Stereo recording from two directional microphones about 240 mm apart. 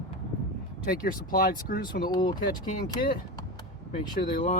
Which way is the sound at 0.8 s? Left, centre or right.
Left.